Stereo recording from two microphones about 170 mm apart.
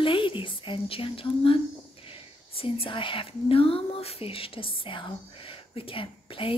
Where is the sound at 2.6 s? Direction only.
30° left (ahead or behind).